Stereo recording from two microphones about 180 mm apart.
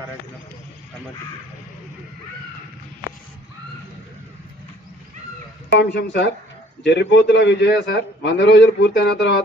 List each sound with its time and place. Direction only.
5.8 s a man's voice: 70° left (ahead or behind)